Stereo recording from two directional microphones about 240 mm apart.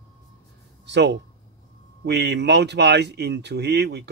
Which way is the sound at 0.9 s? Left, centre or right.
Right.